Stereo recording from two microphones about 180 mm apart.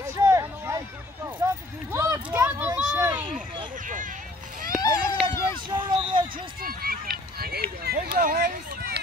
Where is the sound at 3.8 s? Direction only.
45° right (ahead or behind).